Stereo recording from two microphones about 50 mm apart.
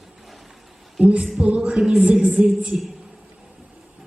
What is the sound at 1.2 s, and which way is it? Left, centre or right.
A woman's voice, centre.